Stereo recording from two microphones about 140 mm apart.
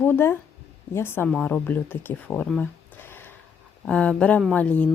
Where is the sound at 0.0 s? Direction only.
15° left (ahead or behind).